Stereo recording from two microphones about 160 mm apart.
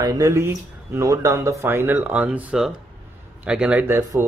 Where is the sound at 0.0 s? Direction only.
20° right (ahead or behind).